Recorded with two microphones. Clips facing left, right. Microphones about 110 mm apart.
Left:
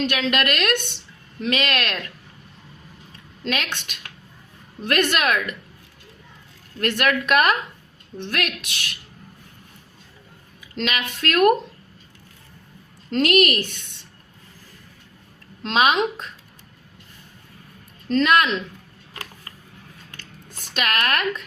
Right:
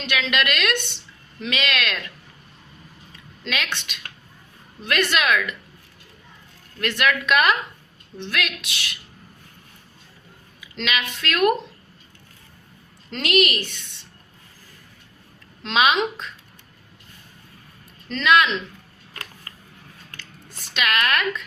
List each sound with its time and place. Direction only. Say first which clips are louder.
0.0 s a woman's voice: left 2 dB; 45° left (ahead or behind)
4.8 s a woman's voice: left 1 dB; 45° left (ahead or behind)
6.7 s a woman's voice: left 1 dB; 45° left (ahead or behind)
10.6 s a woman's voice: left 1 dB; 40° left (ahead or behind)
13.1 s a woman's voice: left 3 dB; 45° left (ahead or behind)
15.6 s a woman's voice: left 1 dB; 45° left (ahead or behind)
18.1 s a woman's voice: left 1 dB; 45° left (ahead or behind)
20.7 s a woman's voice: right 1 dB; 45° left (ahead or behind)